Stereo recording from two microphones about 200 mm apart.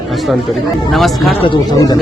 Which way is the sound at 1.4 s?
20° left (ahead or behind).